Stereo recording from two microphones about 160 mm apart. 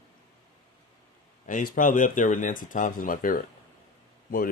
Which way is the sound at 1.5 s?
55° left (ahead or behind).